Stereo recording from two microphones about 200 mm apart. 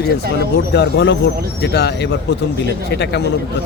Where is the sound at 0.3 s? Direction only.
55° left (ahead or behind).